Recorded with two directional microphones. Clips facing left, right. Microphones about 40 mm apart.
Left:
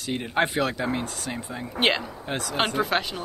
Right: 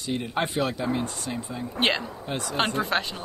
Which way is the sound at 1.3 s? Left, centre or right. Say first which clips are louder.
Right 1 dB; left.